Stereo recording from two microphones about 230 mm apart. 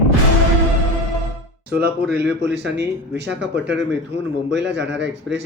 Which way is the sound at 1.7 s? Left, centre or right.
Right.